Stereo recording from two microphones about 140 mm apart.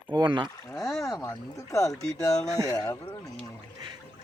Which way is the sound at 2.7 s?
25° left (ahead or behind).